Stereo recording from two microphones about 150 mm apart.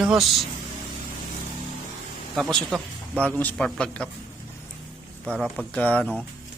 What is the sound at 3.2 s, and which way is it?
Speech, 10° left (ahead or behind).